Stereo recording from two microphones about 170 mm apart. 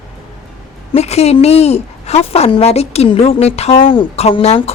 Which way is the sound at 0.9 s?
35° left (ahead or behind).